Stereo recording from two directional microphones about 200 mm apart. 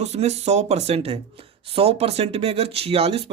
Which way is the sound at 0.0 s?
35° right (ahead or behind).